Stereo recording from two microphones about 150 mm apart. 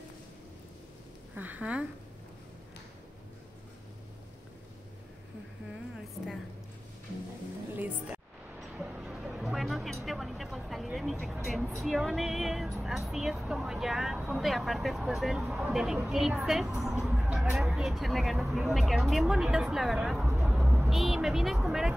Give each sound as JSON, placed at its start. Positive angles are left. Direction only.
{"t": 1.3, "sound": "speech", "side_deg": -10}
{"t": 7.7, "sound": "a woman's voice", "side_deg": -10}
{"t": 8.5, "sound": "a sound", "side_deg": -5}
{"t": 11.4, "sound": "music", "side_deg": 0}
{"t": 11.8, "sound": "speech", "side_deg": 0}